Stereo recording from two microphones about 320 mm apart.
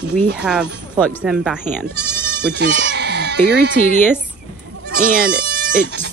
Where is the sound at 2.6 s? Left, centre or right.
Right.